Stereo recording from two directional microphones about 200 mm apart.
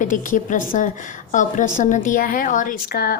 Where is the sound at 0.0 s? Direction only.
40° left (ahead or behind).